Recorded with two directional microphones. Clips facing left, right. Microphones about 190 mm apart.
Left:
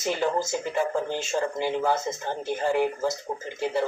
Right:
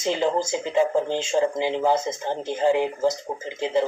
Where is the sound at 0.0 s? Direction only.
20° right (ahead or behind).